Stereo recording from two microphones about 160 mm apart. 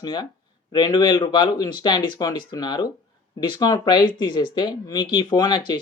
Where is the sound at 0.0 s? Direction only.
25° left (ahead or behind).